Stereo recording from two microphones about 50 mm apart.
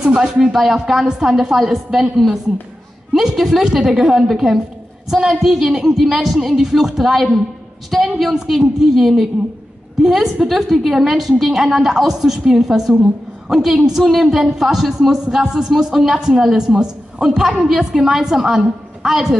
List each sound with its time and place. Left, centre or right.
0.0 s speech: centre
0.5 s a woman's voice: centre
3.1 s a woman's voice: centre